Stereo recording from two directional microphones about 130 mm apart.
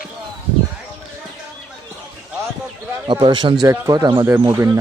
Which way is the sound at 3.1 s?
35° right (ahead or behind).